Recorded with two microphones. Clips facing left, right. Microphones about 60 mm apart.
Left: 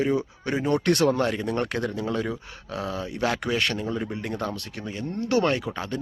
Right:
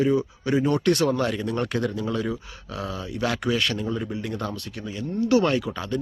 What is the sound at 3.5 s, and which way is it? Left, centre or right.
Speech, left.